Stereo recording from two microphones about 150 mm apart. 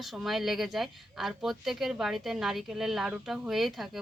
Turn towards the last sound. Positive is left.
turn(degrees=0)  # may be behind; listen again after turning